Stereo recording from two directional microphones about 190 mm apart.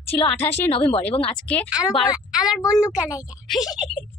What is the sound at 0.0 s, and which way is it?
Speech, 30° left (ahead or behind).